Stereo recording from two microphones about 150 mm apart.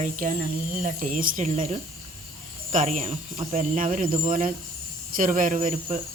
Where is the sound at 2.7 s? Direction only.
55° right (ahead or behind).